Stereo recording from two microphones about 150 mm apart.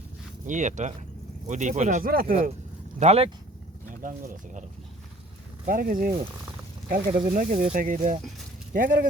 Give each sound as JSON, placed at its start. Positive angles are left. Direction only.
{"t": 0.4, "sound": "speech", "side_deg": -55}
{"t": 2.0, "sound": "speech", "side_deg": -75}
{"t": 3.0, "sound": "speech", "side_deg": -45}
{"t": 4.0, "sound": "speech", "side_deg": -60}
{"t": 5.6, "sound": "speech", "side_deg": -70}
{"t": 7.3, "sound": "speech", "side_deg": -65}